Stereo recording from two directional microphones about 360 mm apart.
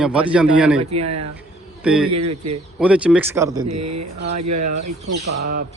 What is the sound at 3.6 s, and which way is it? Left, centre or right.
Speech, right.